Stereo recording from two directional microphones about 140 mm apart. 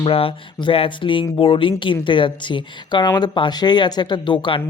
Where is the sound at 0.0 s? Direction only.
40° left (ahead or behind).